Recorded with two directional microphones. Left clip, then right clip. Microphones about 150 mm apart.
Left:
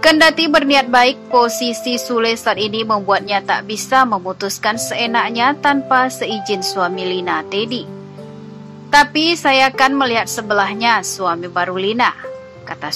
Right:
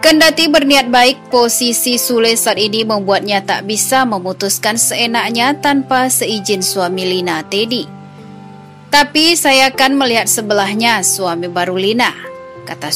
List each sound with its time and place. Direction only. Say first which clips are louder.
0.0 s speech: right 2 dB; 35° right (ahead or behind)
8.9 s speech: right 2 dB; 35° right (ahead or behind)